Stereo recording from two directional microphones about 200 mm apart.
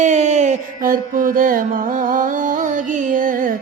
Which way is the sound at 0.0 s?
35° right (ahead or behind).